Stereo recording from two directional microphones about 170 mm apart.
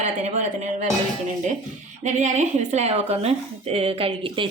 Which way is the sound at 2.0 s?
45° right (ahead or behind).